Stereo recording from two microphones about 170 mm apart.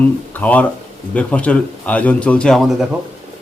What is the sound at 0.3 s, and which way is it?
A man's voice, 10° left (ahead or behind).